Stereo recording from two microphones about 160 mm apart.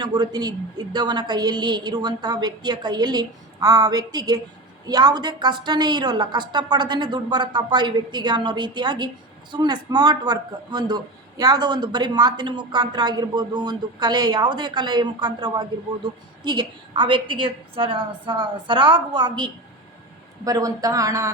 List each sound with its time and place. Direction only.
0.0 s a man's voice: 25° right (ahead or behind)